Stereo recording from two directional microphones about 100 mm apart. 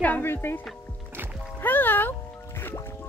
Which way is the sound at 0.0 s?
20° left (ahead or behind).